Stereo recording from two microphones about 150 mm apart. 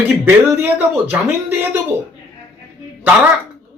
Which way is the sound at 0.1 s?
15° right (ahead or behind).